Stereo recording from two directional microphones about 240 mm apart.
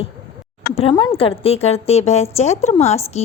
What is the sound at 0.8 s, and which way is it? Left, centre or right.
Speech, left.